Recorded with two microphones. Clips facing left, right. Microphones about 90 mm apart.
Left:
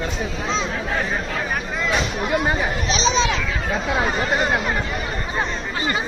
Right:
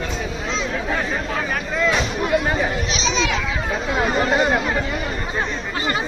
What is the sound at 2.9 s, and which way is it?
Children playing, 35° left (ahead or behind).